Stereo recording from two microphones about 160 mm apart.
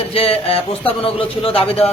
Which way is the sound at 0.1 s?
35° left (ahead or behind).